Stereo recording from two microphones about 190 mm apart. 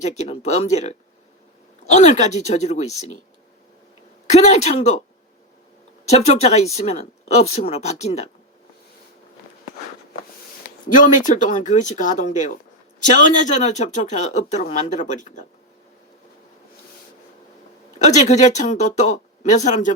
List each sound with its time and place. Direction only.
0.0 s speech: 35° left (ahead or behind)
4.3 s speech: 35° left (ahead or behind)
6.1 s speech: 35° left (ahead or behind)
10.8 s speech: 45° left (ahead or behind)
18.0 s speech: 40° left (ahead or behind)